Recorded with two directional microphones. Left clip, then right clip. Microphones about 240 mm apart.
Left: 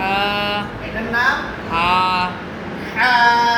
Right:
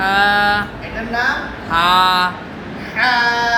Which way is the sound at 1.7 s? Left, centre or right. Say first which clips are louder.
Right 4 dB; right.